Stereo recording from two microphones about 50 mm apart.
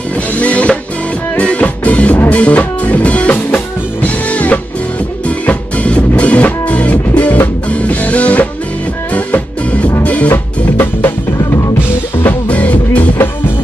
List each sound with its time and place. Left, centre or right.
0.4 s music: left
10.3 s music: left
12.3 s music: left